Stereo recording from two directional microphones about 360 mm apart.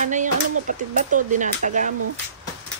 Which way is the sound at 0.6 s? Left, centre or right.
Right.